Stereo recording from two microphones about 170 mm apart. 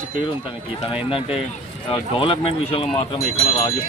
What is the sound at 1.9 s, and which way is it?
Speech, 30° left (ahead or behind).